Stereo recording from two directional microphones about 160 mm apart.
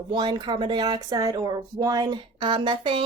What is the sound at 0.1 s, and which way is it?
Speech, 30° right (ahead or behind).